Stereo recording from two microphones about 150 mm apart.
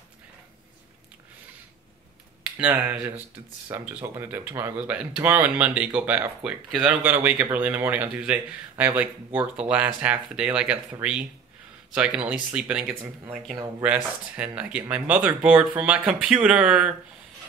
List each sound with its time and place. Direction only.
2.5 s speech: 10° right (ahead or behind)